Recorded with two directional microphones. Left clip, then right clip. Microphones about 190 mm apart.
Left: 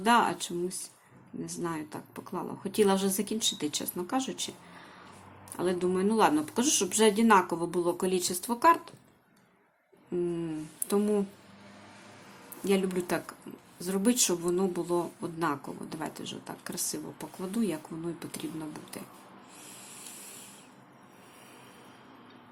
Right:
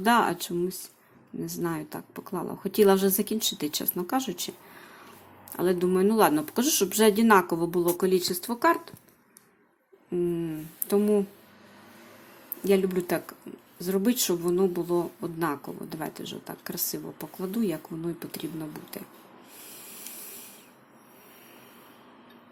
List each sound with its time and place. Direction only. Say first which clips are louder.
0.0 s speech: right 2 dB; 20° right (ahead or behind)
10.1 s speech: right 3 dB; 10° right (ahead or behind)
12.6 s speech: right 5 dB; 15° right (ahead or behind)
19.7 s a sound: right 4 dB; 15° right (ahead or behind)